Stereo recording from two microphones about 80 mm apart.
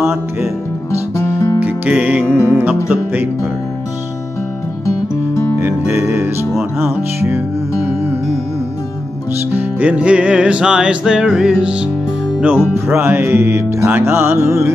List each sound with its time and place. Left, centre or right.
0.0 s music: right
1.1 s music: left
1.6 s music: centre
4.8 s music: left
5.6 s music: right
9.5 s music: right
12.8 s music: right